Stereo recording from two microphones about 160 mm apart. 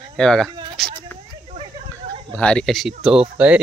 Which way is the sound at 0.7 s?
Centre (ahead or behind).